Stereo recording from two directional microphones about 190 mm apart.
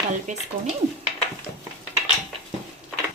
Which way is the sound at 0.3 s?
40° right (ahead or behind).